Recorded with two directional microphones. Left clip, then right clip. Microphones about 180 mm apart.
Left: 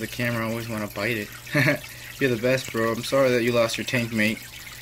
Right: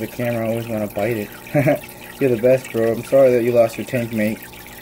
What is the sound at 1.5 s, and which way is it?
Speech, 10° right (ahead or behind).